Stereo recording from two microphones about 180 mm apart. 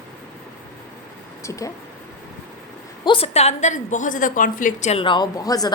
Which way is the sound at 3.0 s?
30° left (ahead or behind).